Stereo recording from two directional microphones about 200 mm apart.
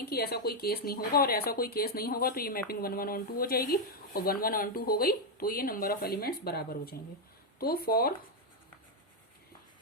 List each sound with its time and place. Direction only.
0.0 s speech: 50° left (ahead or behind)